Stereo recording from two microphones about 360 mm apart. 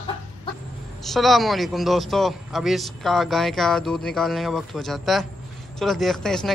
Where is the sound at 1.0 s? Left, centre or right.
Centre.